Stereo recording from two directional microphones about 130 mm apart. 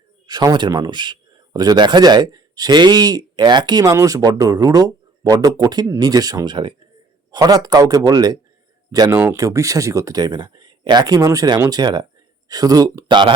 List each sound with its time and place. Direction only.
0.3 s a man's voice: 30° right (ahead or behind)